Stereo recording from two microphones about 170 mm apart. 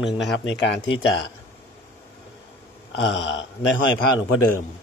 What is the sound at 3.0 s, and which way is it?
Speech, 90° left.